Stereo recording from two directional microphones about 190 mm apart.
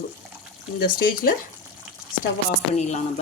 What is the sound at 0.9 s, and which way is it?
Speech, 50° left (ahead or behind).